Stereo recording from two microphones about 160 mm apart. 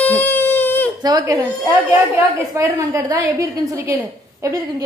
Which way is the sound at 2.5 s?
20° right (ahead or behind).